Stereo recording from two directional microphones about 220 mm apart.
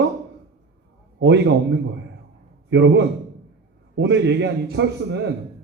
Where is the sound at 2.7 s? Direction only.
55° right (ahead or behind).